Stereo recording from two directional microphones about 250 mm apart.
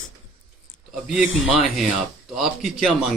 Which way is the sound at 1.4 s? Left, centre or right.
Centre.